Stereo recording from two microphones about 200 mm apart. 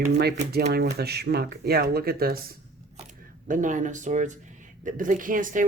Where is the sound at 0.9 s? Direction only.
55° right (ahead or behind).